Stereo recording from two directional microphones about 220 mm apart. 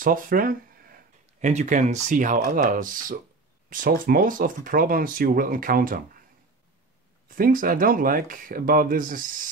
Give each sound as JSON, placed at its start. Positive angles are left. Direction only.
{"t": 0.0, "sound": "speech", "side_deg": -40}
{"t": 7.2, "sound": "speech", "side_deg": -40}